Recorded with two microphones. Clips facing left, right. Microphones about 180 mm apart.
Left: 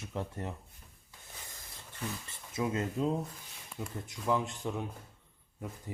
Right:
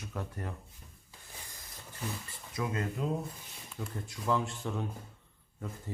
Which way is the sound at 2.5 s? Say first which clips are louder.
Left 2 dB; 20° left (ahead or behind).